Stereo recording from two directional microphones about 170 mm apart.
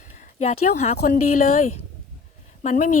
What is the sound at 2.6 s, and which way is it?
Speech, 50° left (ahead or behind).